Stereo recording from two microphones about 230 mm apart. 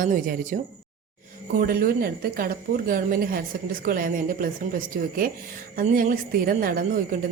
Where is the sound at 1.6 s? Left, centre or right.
Right.